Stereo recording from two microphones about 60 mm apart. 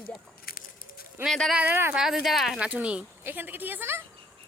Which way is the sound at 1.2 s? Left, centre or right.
Right.